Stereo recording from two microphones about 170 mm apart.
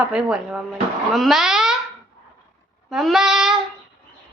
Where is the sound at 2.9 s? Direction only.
Centre (ahead or behind).